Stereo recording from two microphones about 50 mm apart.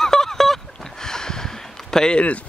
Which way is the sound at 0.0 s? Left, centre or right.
Centre.